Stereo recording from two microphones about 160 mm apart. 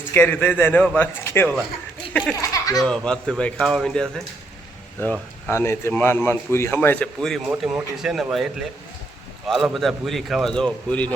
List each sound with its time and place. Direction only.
0.1 s a man's voice: 10° left (ahead or behind)
2.5 s speech: 20° left (ahead or behind)
2.8 s speech: 5° left (ahead or behind)
5.5 s a man's voice: 15° left (ahead or behind); by 8.4 s centre (ahead or behind)
9.5 s speech: centre (ahead or behind)